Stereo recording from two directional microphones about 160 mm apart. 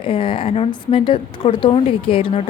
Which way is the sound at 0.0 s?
35° left (ahead or behind).